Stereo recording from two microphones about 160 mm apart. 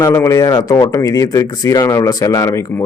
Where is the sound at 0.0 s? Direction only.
20° left (ahead or behind).